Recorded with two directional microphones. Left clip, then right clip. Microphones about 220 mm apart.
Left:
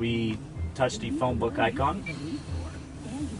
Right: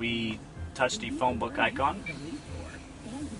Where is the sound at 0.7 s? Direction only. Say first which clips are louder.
Left 1 dB; 5° right (ahead or behind).